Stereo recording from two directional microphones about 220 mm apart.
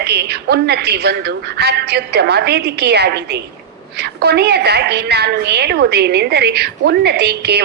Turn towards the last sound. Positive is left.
turn(degrees=-50)  # may be behind; listen again after turning